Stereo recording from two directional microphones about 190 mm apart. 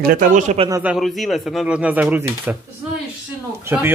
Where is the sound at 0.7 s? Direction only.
5° right (ahead or behind).